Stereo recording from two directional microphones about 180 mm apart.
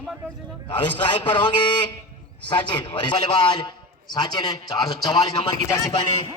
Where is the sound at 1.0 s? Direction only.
25° left (ahead or behind).